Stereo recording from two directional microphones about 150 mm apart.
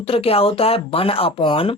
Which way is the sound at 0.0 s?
40° left (ahead or behind).